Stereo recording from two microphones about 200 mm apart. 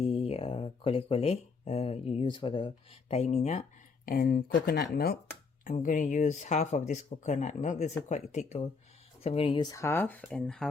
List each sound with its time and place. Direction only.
0.0 s speech: 30° left (ahead or behind); by 10.7 s 5° left (ahead or behind)